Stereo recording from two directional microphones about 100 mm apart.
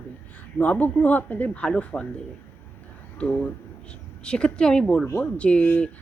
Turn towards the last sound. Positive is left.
turn(degrees=15)  # may be behind; listen again after turning